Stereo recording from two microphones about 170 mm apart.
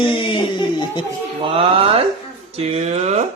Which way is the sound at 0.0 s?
30° left (ahead or behind).